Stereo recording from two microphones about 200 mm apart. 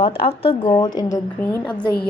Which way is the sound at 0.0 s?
25° left (ahead or behind).